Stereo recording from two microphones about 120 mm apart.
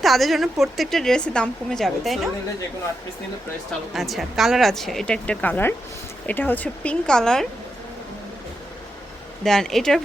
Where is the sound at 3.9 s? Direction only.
Centre (ahead or behind).